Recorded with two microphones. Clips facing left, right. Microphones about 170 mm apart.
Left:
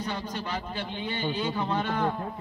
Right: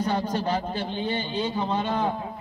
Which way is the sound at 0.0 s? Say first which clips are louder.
Right 8 dB; 40° right (ahead or behind).